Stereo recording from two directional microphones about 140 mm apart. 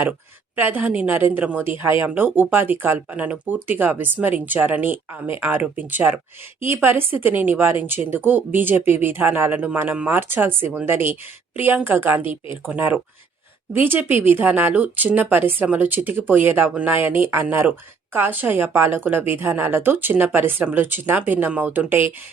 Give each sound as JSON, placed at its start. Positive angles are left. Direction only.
{"t": 0.5, "sound": "speech", "side_deg": -15}